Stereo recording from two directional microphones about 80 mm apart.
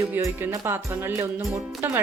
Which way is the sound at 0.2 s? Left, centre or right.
Right.